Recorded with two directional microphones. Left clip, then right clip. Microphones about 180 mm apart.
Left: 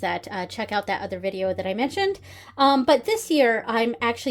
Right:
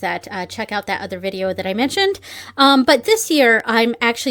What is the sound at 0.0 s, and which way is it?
Speech, 20° right (ahead or behind).